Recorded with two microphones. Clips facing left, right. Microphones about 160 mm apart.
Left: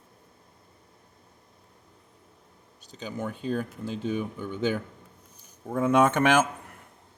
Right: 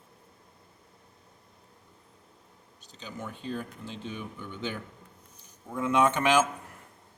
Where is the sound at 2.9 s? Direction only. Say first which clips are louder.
Left 7 dB; 45° left (ahead or behind).